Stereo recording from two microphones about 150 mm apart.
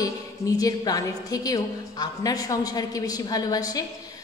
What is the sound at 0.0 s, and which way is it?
A woman's voice, 25° left (ahead or behind).